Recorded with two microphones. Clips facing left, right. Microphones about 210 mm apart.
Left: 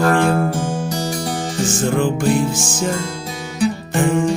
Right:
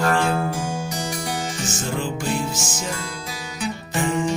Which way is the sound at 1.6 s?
55° left (ahead or behind).